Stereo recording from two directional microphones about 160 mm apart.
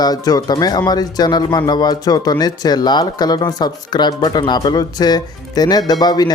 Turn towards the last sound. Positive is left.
turn(degrees=25)  # may be behind; listen again after turning